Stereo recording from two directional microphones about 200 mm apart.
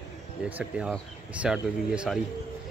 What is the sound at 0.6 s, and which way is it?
Speech, 5° right (ahead or behind).